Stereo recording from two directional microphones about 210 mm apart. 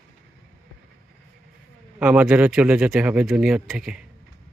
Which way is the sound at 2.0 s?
5° right (ahead or behind).